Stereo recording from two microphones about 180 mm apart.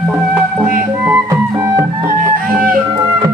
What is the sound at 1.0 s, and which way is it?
Music, 10° right (ahead or behind).